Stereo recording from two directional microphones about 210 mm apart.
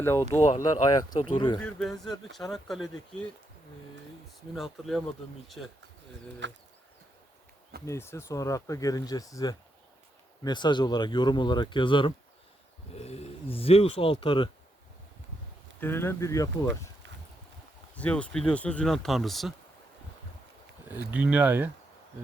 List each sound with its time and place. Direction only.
0.0 s speech: 15° left (ahead or behind)
0.3 s speech: 35° left (ahead or behind)
0.6 s speech: 20° left (ahead or behind)
1.5 s speech: 5° left (ahead or behind)
4.5 s speech: centre (ahead or behind)
6.4 s a sound: 60° right (ahead or behind)
7.9 s speech: 10° left (ahead or behind)
15.8 s speech: 10° left (ahead or behind)
17.9 s speech: 5° left (ahead or behind)
20.8 s speech: 10° right (ahead or behind)